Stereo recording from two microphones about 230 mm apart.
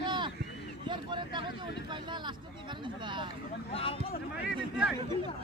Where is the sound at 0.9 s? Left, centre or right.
Centre.